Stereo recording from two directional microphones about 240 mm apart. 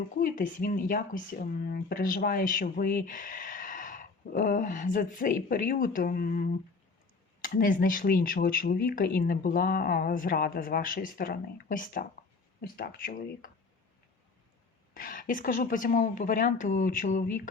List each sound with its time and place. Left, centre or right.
0.2 s speech: left
14.9 s speech: left